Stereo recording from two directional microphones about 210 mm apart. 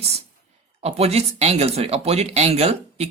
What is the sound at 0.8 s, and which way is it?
Speech, 30° right (ahead or behind).